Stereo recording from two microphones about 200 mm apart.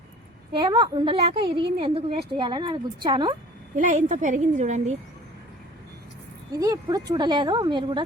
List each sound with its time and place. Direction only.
0.5 s a woman's voice: 25° right (ahead or behind)
3.8 s a woman's voice: 40° right (ahead or behind)
6.6 s a woman's voice: 20° right (ahead or behind)